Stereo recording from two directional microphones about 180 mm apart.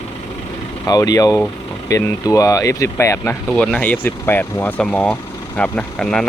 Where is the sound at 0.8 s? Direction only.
20° left (ahead or behind); by 6.3 s 5° left (ahead or behind).